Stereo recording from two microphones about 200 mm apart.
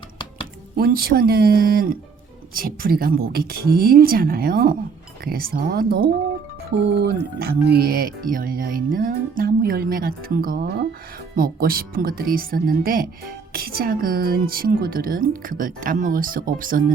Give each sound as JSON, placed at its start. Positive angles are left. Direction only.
{"t": 0.8, "sound": "speech", "side_deg": -50}